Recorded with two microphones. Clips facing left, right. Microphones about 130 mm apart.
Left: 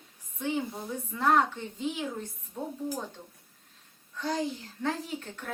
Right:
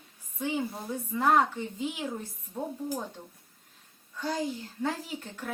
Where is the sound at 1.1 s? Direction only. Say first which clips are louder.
Right 1 dB; 5° right (ahead or behind).